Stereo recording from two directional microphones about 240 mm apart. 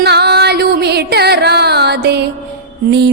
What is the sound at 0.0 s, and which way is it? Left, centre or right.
Music, right.